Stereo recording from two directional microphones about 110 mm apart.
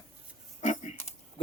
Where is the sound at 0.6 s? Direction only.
90° left.